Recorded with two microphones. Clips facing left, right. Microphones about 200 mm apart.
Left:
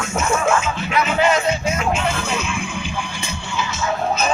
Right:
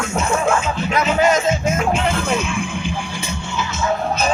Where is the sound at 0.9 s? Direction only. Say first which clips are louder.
Right 1 dB; 45° right (ahead or behind).